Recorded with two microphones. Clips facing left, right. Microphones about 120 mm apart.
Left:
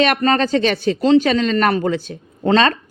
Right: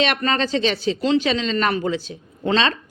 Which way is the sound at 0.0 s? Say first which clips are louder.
Left 5 dB; 45° left (ahead or behind).